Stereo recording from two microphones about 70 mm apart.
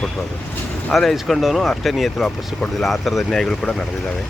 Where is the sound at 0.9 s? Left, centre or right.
Centre.